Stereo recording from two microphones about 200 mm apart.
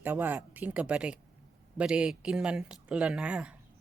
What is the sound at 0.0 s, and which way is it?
Speech, 10° right (ahead or behind).